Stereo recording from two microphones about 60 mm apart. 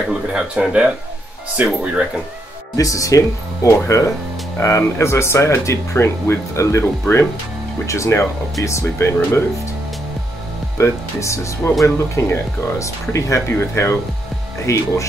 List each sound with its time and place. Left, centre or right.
0.3 s speech: centre
1.6 s speech: right
2.7 s speech: left
10.8 s speech: left
14.7 s speech: left